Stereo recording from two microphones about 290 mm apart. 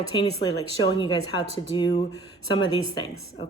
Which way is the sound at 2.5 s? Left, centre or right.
Centre.